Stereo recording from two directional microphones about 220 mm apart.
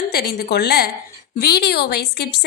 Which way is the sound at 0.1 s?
45° left (ahead or behind).